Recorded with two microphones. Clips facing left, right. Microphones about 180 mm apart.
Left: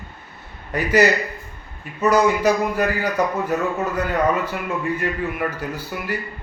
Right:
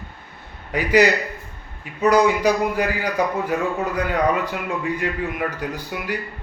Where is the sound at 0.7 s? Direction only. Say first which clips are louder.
Even; 15° right (ahead or behind).